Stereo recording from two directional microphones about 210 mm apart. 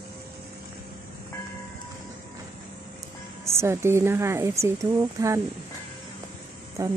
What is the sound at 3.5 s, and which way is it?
Speech, 10° right (ahead or behind).